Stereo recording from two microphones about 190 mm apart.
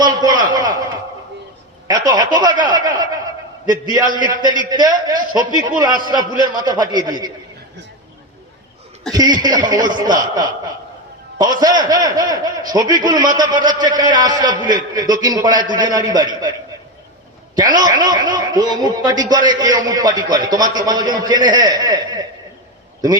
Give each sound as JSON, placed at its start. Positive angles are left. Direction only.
{"t": 0.0, "sound": "a sound", "side_deg": -20}
{"t": 1.9, "sound": "a man's voice", "side_deg": -20}
{"t": 4.2, "sound": "a man's voice", "side_deg": -20}
{"t": 9.1, "sound": "a man's voice", "side_deg": -20}
{"t": 17.6, "sound": "a man's voice", "side_deg": -20}